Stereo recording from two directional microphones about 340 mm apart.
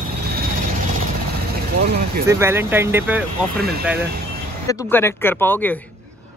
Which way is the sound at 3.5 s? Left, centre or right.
Right.